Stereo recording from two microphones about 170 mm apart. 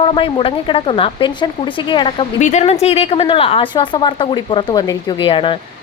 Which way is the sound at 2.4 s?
40° left (ahead or behind).